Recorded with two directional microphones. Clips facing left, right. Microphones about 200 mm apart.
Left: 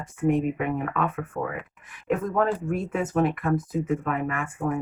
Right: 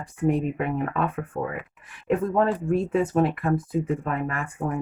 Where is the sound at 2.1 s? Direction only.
30° right (ahead or behind).